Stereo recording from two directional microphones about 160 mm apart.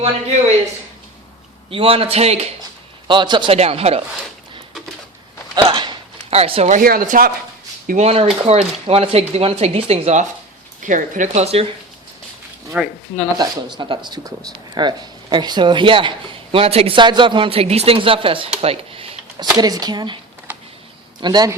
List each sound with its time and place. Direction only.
1.7 s speech: 35° right (ahead or behind)
3.1 s speech: 30° right (ahead or behind)
5.5 s a sound: 30° right (ahead or behind)
6.3 s speech: 40° right (ahead or behind)
6.8 s speech: 60° right (ahead or behind)
7.9 s speech: 45° right (ahead or behind)
12.7 s speech: 5° right (ahead or behind)
13.3 s speech: 25° right (ahead or behind)
18.6 s a sound: 35° right (ahead or behind)
19.5 s speech: 25° right (ahead or behind)
20.5 s a sound: 10° right (ahead or behind)
21.2 s speech: 25° right (ahead or behind)